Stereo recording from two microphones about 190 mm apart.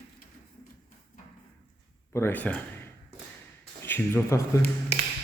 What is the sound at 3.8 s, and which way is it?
Speech, 10° left (ahead or behind).